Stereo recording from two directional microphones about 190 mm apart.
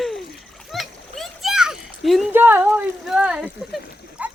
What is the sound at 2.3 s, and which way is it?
Speech, 10° right (ahead or behind).